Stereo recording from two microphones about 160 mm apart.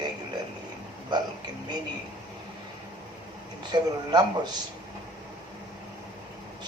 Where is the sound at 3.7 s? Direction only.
25° right (ahead or behind).